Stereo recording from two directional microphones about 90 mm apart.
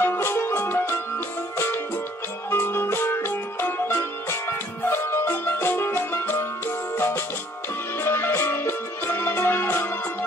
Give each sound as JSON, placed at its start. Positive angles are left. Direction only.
{"t": 0.0, "sound": "music", "side_deg": 25}
{"t": 2.5, "sound": "music", "side_deg": 25}